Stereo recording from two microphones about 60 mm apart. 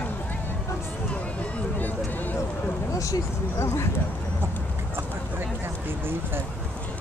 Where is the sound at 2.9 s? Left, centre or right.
Left.